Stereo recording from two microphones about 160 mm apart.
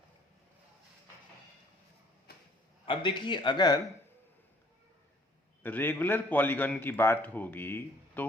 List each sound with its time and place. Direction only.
2.3 s a sound: 75° left (ahead or behind)
2.8 s speech: 30° left (ahead or behind)
5.6 s a man's voice: 10° left (ahead or behind)